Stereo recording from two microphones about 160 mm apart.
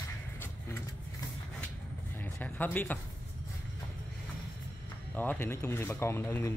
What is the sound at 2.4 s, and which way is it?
Speech, 10° left (ahead or behind).